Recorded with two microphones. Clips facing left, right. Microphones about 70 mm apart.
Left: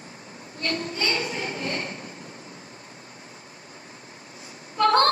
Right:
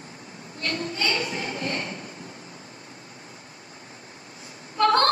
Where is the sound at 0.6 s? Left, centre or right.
Left.